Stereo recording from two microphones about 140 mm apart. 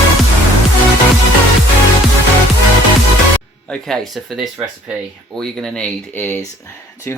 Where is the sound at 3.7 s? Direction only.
5° left (ahead or behind).